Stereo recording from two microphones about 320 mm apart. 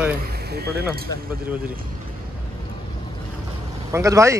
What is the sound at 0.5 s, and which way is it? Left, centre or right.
Speech, right.